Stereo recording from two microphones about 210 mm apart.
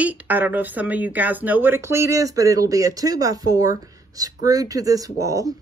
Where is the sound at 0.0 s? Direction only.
5° right (ahead or behind).